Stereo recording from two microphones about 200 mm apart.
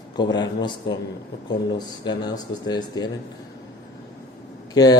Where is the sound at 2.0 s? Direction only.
20° left (ahead or behind).